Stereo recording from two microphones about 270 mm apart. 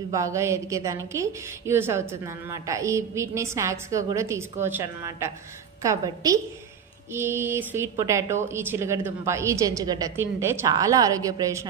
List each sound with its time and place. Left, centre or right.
0.1 s a woman's voice: centre